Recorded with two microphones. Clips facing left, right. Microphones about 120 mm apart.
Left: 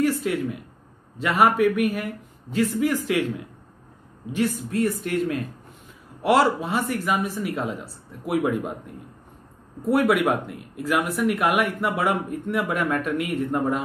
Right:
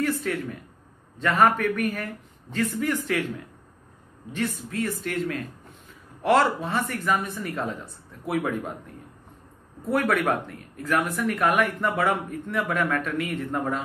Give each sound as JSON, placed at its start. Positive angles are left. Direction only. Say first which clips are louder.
{"t": 0.0, "sound": "a sound", "louder": "left 4 dB", "side_deg": 15}
{"t": 1.2, "sound": "speech", "louder": "left 2 dB", "side_deg": 10}
{"t": 4.6, "sound": "speech", "louder": "left 5 dB", "side_deg": 20}